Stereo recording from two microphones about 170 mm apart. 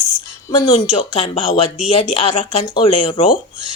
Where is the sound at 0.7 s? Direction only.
35° left (ahead or behind).